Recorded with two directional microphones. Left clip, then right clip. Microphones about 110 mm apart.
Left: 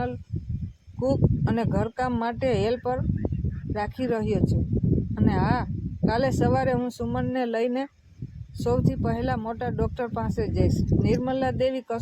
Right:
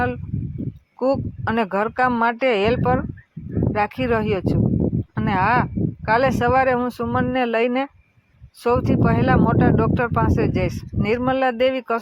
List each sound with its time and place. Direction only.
1.0 s speech: 15° right (ahead or behind)